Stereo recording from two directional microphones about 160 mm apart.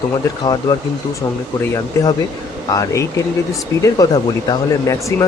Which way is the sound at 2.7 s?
20° left (ahead or behind).